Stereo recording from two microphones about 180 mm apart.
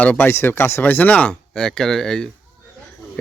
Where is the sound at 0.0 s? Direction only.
10° left (ahead or behind).